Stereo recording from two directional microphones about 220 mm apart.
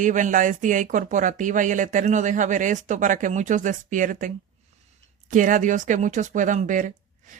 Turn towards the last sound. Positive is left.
turn(degrees=-35)  # may be behind; listen again after turning